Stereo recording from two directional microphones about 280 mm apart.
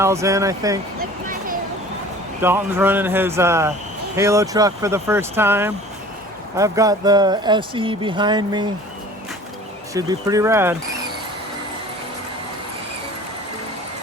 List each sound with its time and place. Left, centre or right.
0.0 s speech: centre
2.4 s speech: centre
9.9 s speech: centre